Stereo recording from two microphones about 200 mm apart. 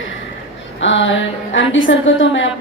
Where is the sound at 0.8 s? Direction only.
70° left (ahead or behind).